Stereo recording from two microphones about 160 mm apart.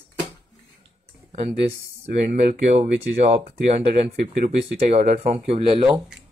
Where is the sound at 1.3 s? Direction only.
40° right (ahead or behind).